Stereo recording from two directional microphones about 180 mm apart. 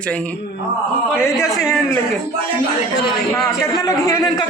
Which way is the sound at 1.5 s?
Centre (ahead or behind).